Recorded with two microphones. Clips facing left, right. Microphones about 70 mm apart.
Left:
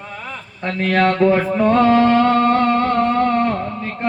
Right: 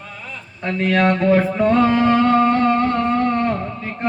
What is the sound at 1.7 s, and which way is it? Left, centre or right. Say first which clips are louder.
Music: left 3 dB; centre.